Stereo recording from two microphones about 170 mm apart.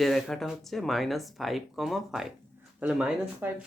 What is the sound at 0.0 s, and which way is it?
Speech, centre (ahead or behind).